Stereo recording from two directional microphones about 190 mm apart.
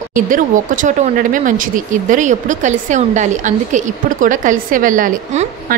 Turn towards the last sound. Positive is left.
turn(degrees=-40)  # may be behind; listen again after turning